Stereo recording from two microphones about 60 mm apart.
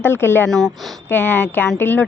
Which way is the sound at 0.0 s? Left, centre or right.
Left.